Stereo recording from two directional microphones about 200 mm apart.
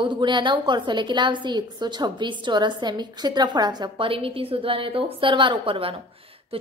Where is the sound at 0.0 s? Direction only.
25° right (ahead or behind).